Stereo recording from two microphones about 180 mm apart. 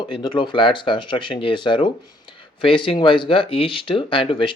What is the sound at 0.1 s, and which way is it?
Speech, 25° left (ahead or behind).